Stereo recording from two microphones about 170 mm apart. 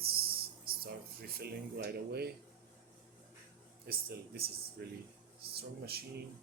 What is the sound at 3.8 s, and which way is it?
Speech, 65° right (ahead or behind).